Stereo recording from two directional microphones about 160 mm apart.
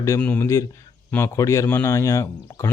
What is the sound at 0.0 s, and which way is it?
A man's voice, 15° left (ahead or behind).